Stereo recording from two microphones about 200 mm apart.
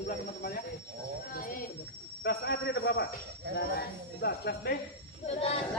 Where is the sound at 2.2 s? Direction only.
55° left (ahead or behind).